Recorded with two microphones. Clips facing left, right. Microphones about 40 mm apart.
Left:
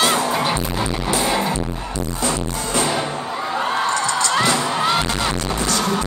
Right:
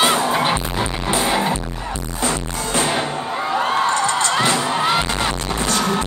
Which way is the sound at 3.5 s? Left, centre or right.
Centre.